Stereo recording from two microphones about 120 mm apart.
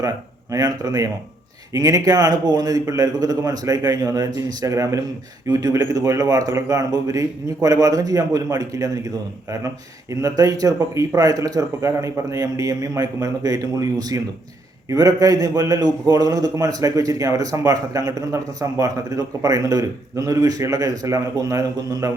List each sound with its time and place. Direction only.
0.5 s a man's voice: 30° right (ahead or behind)